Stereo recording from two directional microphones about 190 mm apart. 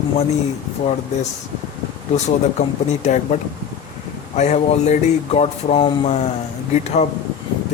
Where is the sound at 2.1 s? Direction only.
40° left (ahead or behind).